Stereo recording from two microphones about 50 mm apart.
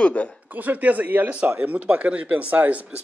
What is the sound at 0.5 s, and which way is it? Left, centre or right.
A man's voice, right.